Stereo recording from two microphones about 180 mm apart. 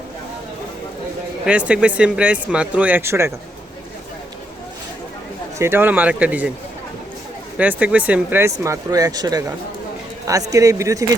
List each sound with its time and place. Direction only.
1.5 s speech: 5° right (ahead or behind)
5.5 s speech: 15° right (ahead or behind)
7.6 s speech: 10° right (ahead or behind)
10.5 s speech: 15° right (ahead or behind)